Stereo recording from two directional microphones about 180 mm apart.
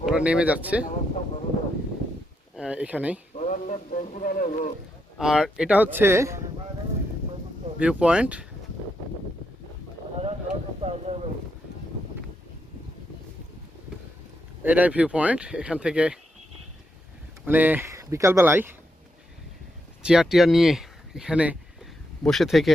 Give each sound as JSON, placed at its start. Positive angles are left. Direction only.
{"t": 0.0, "sound": "speech", "side_deg": -5}
{"t": 2.6, "sound": "speech", "side_deg": -5}
{"t": 3.3, "sound": "a sound", "side_deg": 45}
{"t": 5.1, "sound": "speech", "side_deg": 0}
{"t": 7.8, "sound": "speech", "side_deg": -5}
{"t": 10.2, "sound": "a sound", "side_deg": -30}
{"t": 14.6, "sound": "speech", "side_deg": -10}
{"t": 17.4, "sound": "speech", "side_deg": -10}
{"t": 20.0, "sound": "speech", "side_deg": -5}